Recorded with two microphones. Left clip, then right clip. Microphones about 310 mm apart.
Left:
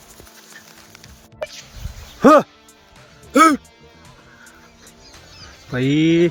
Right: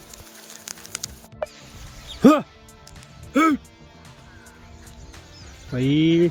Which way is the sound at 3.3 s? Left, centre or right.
Centre.